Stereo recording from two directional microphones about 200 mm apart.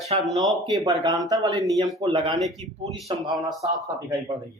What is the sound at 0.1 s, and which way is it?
Speech, 30° right (ahead or behind).